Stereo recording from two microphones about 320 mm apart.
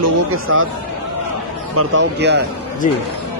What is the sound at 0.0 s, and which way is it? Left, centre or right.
Speech, right.